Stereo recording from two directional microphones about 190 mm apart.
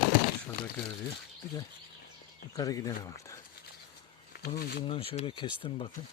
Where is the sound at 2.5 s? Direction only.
15° left (ahead or behind).